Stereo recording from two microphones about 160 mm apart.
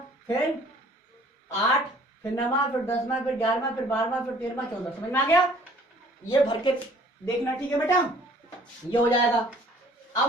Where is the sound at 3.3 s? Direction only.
10° left (ahead or behind).